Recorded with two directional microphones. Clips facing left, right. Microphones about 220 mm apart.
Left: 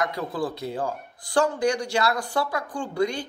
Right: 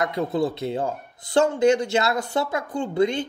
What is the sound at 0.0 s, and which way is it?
A man's voice, 25° right (ahead or behind).